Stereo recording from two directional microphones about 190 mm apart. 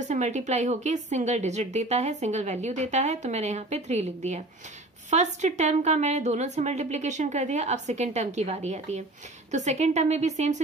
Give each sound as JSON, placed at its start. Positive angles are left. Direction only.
{"t": 0.0, "sound": "a woman's voice", "side_deg": -35}